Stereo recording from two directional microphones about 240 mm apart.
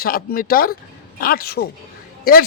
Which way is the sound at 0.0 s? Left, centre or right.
Left.